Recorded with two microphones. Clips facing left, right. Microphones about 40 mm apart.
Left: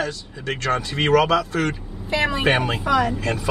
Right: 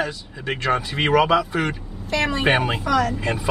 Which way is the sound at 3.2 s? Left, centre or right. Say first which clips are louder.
Even; centre.